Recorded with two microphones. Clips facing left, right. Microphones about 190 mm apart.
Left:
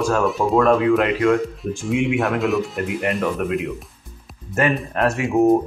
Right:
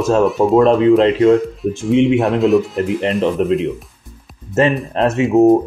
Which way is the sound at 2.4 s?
Centre (ahead or behind).